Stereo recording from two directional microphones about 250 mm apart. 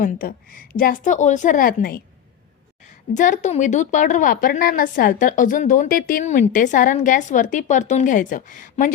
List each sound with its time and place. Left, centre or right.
0.0 s a woman's voice: left
3.2 s a woman's voice: left